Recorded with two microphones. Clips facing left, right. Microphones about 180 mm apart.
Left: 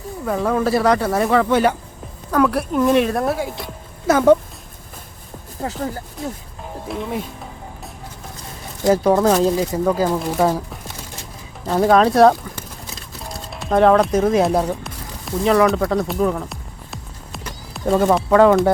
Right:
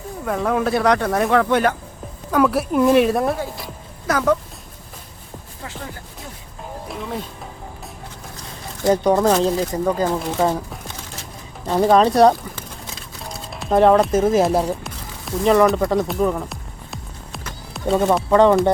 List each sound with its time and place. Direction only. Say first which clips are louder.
0.3 s speech: left 1 dB; centre (ahead or behind)
4.0 s speech: left 6 dB; 25° left (ahead or behind)
5.6 s speech: left 9 dB; 40° left (ahead or behind)
6.8 s speech: left 5 dB; centre (ahead or behind)
9.1 s speech: left 1 dB; 5° left (ahead or behind)
13.2 s music: right 1 dB; centre (ahead or behind)
17.9 s speech: left 1 dB; centre (ahead or behind)